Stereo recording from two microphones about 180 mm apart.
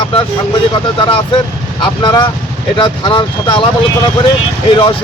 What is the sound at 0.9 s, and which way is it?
Speech, 30° left (ahead or behind).